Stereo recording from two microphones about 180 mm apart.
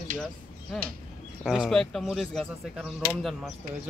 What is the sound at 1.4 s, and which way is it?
Speech, centre (ahead or behind).